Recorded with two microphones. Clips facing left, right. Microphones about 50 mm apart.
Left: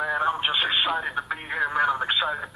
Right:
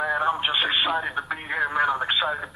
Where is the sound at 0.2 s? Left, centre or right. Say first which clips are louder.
Right 1 dB; right.